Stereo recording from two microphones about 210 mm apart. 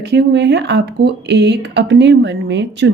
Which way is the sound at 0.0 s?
55° right (ahead or behind).